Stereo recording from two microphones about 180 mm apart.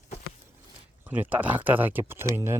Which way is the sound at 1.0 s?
10° right (ahead or behind).